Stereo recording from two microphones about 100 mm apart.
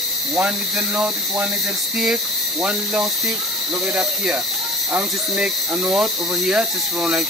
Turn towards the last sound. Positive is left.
turn(degrees=-10)  # may be behind; listen again after turning